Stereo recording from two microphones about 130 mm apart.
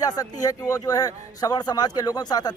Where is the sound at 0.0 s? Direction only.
30° left (ahead or behind).